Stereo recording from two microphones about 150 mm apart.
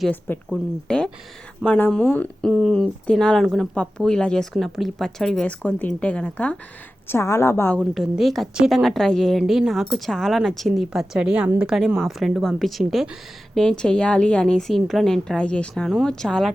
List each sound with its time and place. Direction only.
0.5 s a woman's voice: 5° left (ahead or behind)
7.8 s a woman's voice: 5° right (ahead or behind)